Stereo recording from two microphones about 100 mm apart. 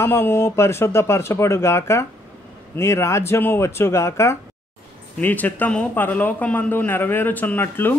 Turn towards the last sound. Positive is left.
turn(degrees=20)  # may be behind; listen again after turning